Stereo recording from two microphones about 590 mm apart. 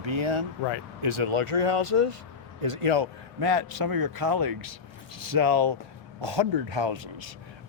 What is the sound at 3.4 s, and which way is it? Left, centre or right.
Speech, right.